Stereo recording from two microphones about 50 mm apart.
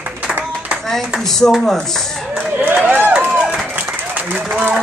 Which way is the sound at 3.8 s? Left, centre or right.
Right.